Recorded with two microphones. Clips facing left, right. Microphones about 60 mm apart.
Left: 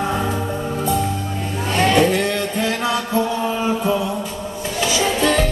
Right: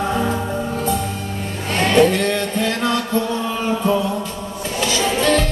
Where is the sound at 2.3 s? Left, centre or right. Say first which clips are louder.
Right 1 dB; centre.